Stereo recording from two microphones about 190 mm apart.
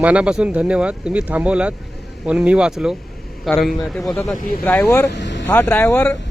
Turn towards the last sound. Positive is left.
turn(degrees=10)  # may be behind; listen again after turning